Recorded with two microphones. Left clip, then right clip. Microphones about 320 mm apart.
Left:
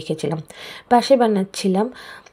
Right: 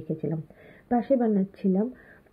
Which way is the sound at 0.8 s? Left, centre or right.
Centre.